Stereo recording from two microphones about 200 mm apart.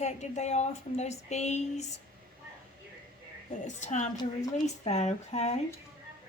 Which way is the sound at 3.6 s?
35° left (ahead or behind).